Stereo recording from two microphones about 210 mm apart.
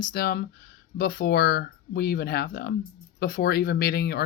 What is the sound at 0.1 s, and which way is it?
Speech, 45° left (ahead or behind).